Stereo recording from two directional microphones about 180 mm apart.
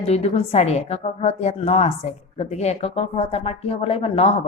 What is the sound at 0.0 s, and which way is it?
Speech, 35° left (ahead or behind).